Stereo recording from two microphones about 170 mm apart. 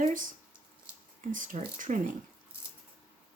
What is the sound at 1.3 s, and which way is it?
Speech, 50° right (ahead or behind).